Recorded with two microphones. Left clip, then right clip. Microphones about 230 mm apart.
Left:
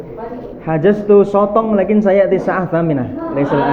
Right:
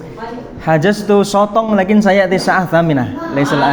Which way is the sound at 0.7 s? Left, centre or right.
Right.